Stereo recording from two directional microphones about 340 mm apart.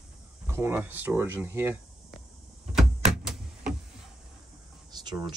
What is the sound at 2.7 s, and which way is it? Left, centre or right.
Typewriter, centre.